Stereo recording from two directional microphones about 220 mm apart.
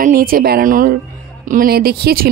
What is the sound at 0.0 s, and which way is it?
Speech, 40° right (ahead or behind).